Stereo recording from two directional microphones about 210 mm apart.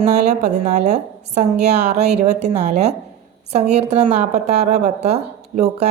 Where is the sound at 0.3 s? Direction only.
35° right (ahead or behind).